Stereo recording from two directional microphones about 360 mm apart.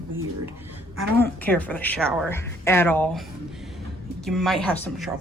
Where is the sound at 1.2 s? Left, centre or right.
Centre.